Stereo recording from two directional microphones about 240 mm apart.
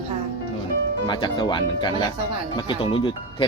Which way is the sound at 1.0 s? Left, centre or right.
Centre.